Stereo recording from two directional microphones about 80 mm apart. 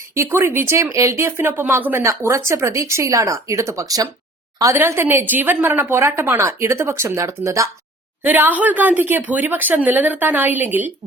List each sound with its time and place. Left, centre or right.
0.1 s a woman's voice: right
4.8 s a woman's voice: right
8.2 s speech: right